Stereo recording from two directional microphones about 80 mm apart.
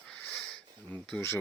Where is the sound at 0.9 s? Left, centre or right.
Centre.